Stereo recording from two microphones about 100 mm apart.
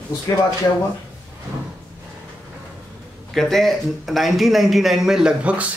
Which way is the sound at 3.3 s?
Centre (ahead or behind).